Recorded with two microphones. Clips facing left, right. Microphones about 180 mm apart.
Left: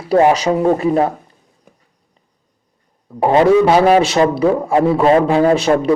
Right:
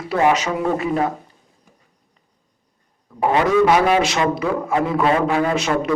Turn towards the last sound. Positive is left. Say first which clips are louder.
# left 7 dB
turn(degrees=30)  # may be behind; listen again after turning